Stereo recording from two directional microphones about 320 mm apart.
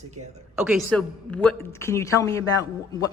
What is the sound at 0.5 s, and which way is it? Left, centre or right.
A woman's voice, centre.